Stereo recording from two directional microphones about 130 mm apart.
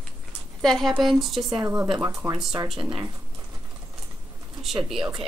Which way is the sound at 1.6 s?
20° right (ahead or behind).